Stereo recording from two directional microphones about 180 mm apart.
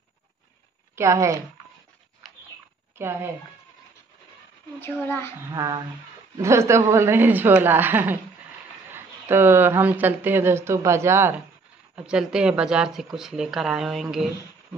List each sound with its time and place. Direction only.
0.9 s speech: 15° right (ahead or behind)
3.0 s speech: 15° right (ahead or behind)
4.7 s a child's voice: 10° left (ahead or behind)
5.5 s speech: 20° right (ahead or behind); by 14.0 s 5° right (ahead or behind)